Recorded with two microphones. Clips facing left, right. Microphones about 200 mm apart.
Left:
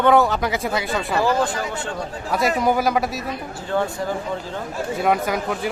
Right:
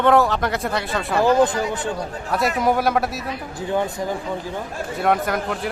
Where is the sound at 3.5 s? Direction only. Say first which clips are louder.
Right 1 dB; 15° right (ahead or behind).